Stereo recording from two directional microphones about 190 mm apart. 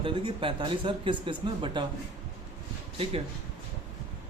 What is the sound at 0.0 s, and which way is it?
Speech, 25° right (ahead or behind).